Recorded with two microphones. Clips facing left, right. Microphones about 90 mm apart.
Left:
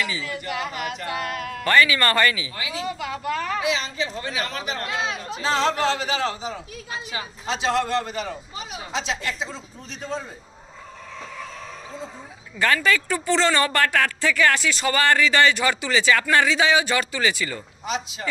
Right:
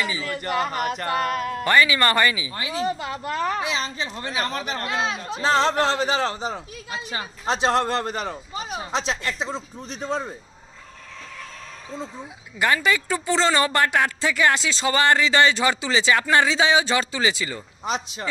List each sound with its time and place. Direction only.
0.2 s speech: 45° right (ahead or behind)
1.6 s speech: 20° right (ahead or behind)
2.5 s speech: 40° right (ahead or behind)
3.5 s speech: 45° right (ahead or behind)
12.5 s speech: 15° right (ahead or behind)